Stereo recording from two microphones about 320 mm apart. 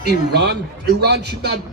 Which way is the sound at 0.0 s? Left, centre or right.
Right.